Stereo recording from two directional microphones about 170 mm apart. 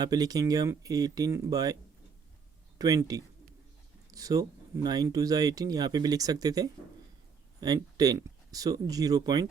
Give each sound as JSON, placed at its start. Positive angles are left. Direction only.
{"t": 0.0, "sound": "speech", "side_deg": -20}